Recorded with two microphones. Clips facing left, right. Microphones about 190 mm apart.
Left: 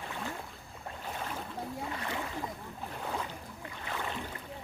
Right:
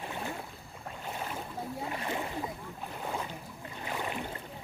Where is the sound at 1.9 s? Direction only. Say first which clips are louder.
Right 2 dB; 20° right (ahead or behind).